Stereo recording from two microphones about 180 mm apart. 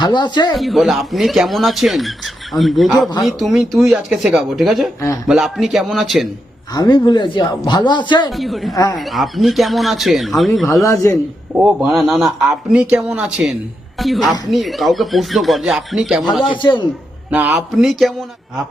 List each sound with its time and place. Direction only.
0.0 s speech: 25° left (ahead or behind)
0.5 s speech: centre (ahead or behind)
4.9 s a man's voice: 15° left (ahead or behind)
5.3 s speech: centre (ahead or behind)
6.7 s speech: 25° left (ahead or behind)
8.3 s speech: centre (ahead or behind)
8.7 s speech: 20° left (ahead or behind)
9.0 s speech: centre (ahead or behind)
10.8 s a man's voice: 15° left (ahead or behind)
11.6 s speech: centre (ahead or behind)
16.5 s speech: 25° left (ahead or behind)
17.3 s speech: 5° right (ahead or behind)